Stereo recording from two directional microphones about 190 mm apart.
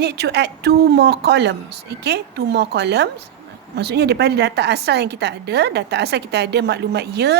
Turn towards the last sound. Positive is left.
turn(degrees=-60)  # may be behind; listen again after turning